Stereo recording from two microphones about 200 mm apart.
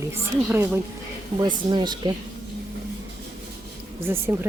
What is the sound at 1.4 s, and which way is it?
Speech, 20° right (ahead or behind).